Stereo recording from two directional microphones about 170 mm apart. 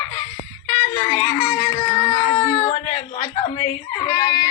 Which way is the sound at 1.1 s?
30° left (ahead or behind).